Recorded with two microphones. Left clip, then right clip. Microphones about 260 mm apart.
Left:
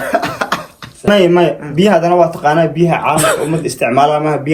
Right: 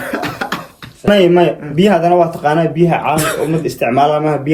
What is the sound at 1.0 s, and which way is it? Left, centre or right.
Speech, centre.